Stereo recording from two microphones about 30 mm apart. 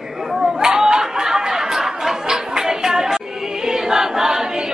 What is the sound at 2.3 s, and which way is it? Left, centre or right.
Choir, centre.